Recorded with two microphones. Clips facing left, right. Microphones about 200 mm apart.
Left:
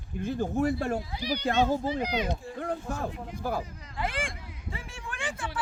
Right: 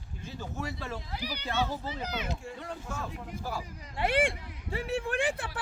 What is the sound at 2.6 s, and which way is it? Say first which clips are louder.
A man's voice: left 6 dB; 55° left (ahead or behind).